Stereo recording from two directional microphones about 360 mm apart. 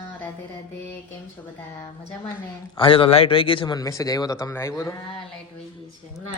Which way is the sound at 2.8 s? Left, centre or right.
Centre.